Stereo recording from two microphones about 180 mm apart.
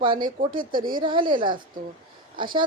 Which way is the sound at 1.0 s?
25° right (ahead or behind).